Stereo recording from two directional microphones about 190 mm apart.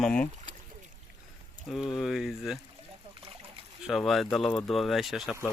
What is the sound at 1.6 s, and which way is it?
Speech, centre (ahead or behind).